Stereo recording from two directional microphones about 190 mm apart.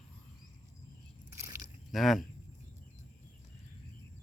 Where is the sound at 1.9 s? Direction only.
Centre (ahead or behind).